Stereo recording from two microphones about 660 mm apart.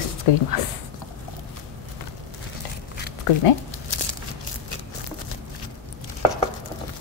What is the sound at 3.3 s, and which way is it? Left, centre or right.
Speech, left.